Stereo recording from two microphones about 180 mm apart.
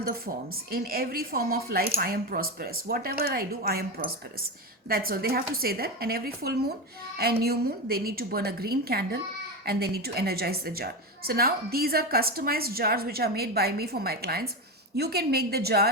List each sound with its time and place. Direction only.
0.5 s a woman's voice: 55° right (ahead or behind)